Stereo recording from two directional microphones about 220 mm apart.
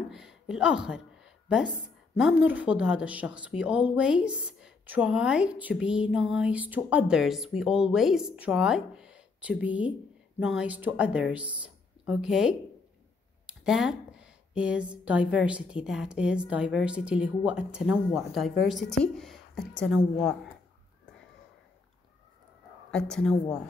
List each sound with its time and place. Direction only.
0.1 s a sound: centre (ahead or behind)
2.1 s a woman's voice: 5° right (ahead or behind)
22.8 s a woman's voice: 5° left (ahead or behind)